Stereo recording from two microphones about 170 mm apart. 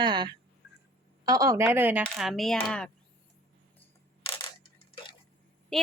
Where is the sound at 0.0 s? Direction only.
25° right (ahead or behind).